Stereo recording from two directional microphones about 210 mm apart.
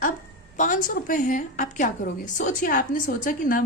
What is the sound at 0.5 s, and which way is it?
A woman's voice, 40° left (ahead or behind).